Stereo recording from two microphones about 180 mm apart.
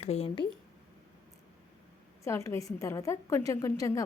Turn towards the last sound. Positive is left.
turn(degrees=20)  # may be behind; listen again after turning